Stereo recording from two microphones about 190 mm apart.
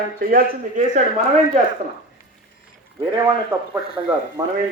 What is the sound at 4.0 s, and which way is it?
Speech, 15° right (ahead or behind).